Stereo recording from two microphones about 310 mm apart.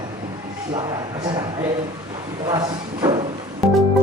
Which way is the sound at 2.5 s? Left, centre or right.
Centre.